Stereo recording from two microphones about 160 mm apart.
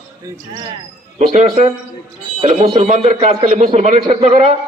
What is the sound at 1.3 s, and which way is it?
A man's voice, 45° right (ahead or behind).